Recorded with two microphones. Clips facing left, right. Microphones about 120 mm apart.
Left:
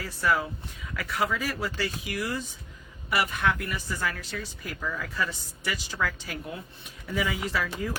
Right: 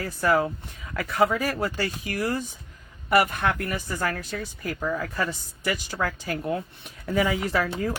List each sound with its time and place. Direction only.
0.0 s speech: 50° right (ahead or behind)